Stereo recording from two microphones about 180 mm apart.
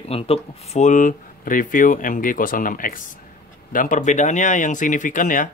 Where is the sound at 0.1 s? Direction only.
35° left (ahead or behind).